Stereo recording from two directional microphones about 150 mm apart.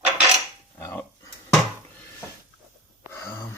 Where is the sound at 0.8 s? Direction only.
20° left (ahead or behind).